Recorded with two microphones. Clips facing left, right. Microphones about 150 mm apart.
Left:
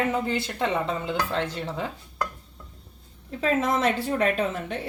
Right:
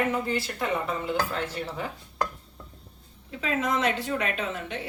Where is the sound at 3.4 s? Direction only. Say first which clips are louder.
Left 3 dB; 40° left (ahead or behind).